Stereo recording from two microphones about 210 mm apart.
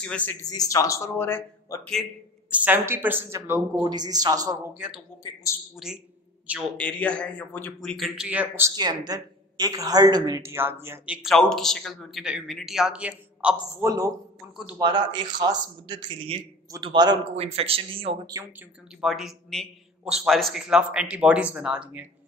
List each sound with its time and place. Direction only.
0.0 s speech: 5° left (ahead or behind)
0.5 s speech: 15° left (ahead or behind)
2.5 s a man's voice: 10° right (ahead or behind)
4.7 s a man's voice: 5° right (ahead or behind)
6.8 s speech: 5° left (ahead or behind); by 11.1 s 10° right (ahead or behind)
11.2 s a man's voice: centre (ahead or behind); by 18.5 s 15° right (ahead or behind)
18.9 s a man's voice: centre (ahead or behind)